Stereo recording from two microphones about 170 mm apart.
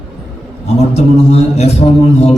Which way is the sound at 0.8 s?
40° left (ahead or behind).